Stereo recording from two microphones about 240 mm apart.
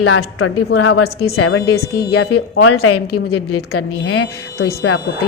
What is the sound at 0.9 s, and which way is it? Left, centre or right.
Speech, left.